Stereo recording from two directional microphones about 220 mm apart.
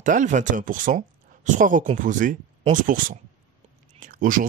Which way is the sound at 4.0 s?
40° right (ahead or behind).